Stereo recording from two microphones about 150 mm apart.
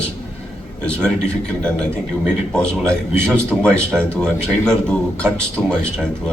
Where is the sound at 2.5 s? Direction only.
5° left (ahead or behind).